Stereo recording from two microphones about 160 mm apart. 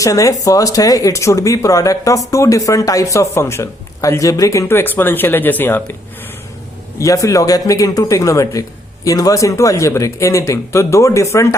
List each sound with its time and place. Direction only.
0.0 s speech: 20° left (ahead or behind)
7.0 s speech: 20° left (ahead or behind)